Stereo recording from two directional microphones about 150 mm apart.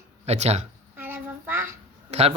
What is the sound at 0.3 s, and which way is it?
Speech, 45° right (ahead or behind).